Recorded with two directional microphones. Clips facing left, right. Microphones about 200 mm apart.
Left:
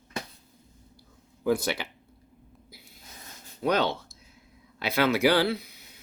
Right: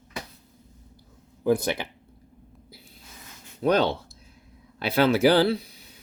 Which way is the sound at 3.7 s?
30° right (ahead or behind).